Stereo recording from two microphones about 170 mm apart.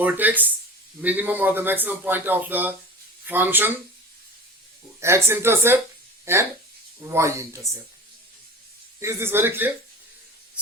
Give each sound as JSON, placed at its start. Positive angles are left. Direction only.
{"t": 0.0, "sound": "a man's voice", "side_deg": -10}
{"t": 4.9, "sound": "a man's voice", "side_deg": -15}
{"t": 9.0, "sound": "a man's voice", "side_deg": -15}